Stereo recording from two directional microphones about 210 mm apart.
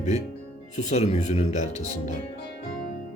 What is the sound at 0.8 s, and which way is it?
Speech, 30° left (ahead or behind).